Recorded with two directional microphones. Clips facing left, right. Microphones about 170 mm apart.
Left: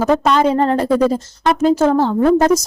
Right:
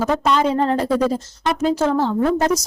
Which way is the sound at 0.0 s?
55° left (ahead or behind).